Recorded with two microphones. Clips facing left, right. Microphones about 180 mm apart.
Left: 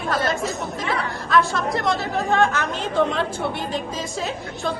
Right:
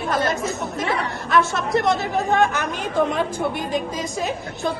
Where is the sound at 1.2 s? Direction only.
20° right (ahead or behind).